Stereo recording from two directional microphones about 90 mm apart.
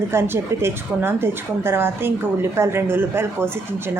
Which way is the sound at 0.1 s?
25° right (ahead or behind).